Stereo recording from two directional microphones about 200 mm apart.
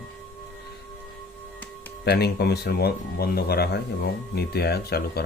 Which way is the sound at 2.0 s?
55° left (ahead or behind).